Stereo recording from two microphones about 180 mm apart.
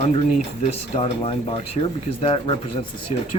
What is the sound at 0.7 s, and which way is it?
Speech, 35° left (ahead or behind).